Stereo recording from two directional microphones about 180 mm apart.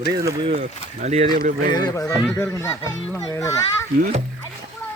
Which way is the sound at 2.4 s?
15° left (ahead or behind).